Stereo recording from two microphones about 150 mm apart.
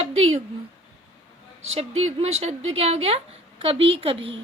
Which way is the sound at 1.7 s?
45° right (ahead or behind).